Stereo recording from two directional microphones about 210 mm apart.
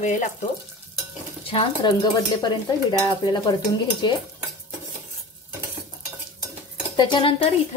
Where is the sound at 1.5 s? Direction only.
25° left (ahead or behind).